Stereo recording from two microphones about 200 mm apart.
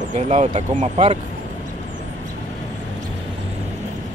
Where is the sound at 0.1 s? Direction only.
35° right (ahead or behind).